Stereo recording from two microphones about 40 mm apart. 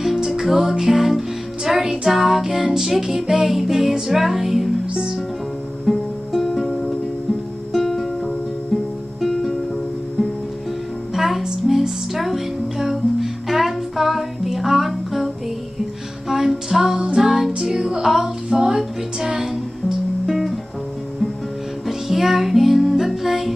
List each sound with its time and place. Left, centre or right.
0.0 s music: centre
5.9 s music: centre
11.1 s music: centre
21.8 s music: centre